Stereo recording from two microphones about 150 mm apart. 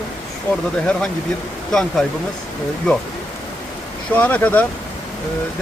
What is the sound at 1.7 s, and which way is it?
Speech, 5° left (ahead or behind).